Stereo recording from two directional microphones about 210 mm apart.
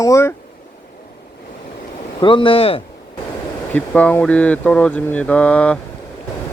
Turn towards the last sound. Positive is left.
turn(degrees=5)  # may be behind; listen again after turning